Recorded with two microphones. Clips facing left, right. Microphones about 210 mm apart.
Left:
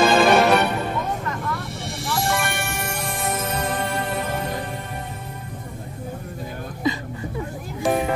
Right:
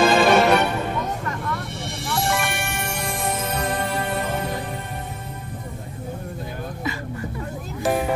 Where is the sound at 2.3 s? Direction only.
Centre (ahead or behind).